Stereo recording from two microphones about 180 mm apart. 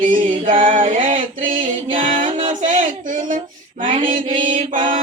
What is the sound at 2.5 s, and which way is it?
Female singing, 45° right (ahead or behind).